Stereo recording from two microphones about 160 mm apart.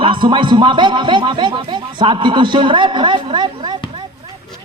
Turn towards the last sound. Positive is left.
turn(degrees=-25)  # may be behind; listen again after turning